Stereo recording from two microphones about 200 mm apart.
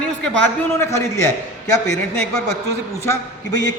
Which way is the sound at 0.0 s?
5° left (ahead or behind).